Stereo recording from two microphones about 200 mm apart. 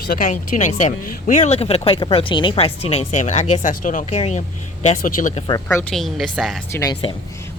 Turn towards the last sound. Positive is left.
turn(degrees=20)  # may be behind; listen again after turning